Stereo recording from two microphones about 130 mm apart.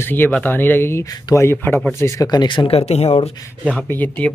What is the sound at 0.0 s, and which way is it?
Speech, 15° left (ahead or behind).